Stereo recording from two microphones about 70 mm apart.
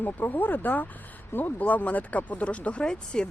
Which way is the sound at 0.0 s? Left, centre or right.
Left.